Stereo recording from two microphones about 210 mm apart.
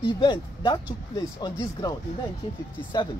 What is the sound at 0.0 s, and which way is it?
Speech, 25° left (ahead or behind).